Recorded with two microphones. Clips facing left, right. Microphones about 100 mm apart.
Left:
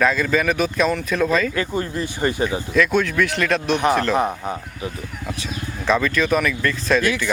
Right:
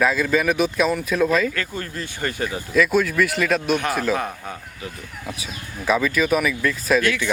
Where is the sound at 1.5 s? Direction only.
20° left (ahead or behind).